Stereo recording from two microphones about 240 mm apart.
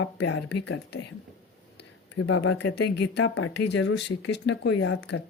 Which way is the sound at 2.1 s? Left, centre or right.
Left.